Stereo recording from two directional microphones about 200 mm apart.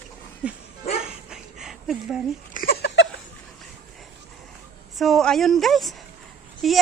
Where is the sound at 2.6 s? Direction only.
55° left (ahead or behind).